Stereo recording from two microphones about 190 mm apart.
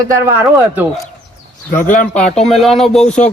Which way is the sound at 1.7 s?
40° left (ahead or behind).